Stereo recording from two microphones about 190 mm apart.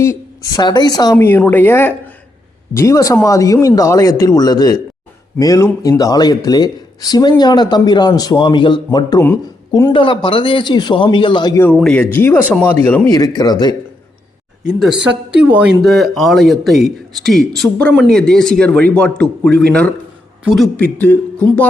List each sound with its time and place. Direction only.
0.0 s speech: 15° left (ahead or behind)
9.9 s speech: 25° left (ahead or behind)
11.6 s speech: 5° left (ahead or behind)
13.1 s speech: 20° left (ahead or behind)
14.8 s a man's voice: 5° right (ahead or behind)
20.7 s speech: 10° left (ahead or behind)